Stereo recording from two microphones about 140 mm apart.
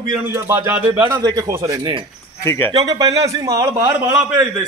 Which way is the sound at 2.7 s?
25° right (ahead or behind).